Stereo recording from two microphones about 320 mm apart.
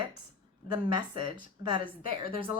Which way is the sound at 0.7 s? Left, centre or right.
Centre.